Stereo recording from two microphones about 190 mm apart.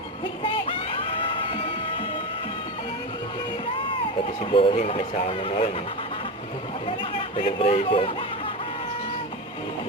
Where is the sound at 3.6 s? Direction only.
25° left (ahead or behind).